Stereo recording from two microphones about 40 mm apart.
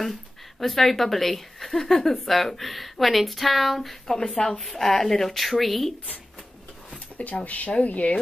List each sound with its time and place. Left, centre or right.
0.0 s a woman's voice: centre
4.4 s a woman's voice: centre
7.2 s speech: left